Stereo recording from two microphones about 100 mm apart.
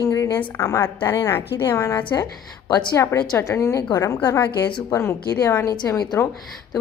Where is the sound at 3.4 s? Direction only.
30° left (ahead or behind).